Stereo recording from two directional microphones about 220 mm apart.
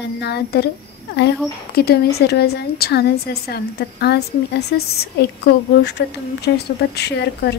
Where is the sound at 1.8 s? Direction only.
45° left (ahead or behind).